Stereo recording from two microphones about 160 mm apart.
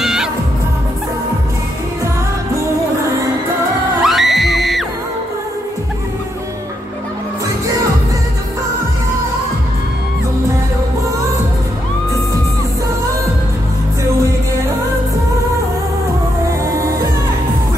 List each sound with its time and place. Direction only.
0.0 s music: centre (ahead or behind)
4.0 s music: centre (ahead or behind)
16.4 s music: 20° right (ahead or behind)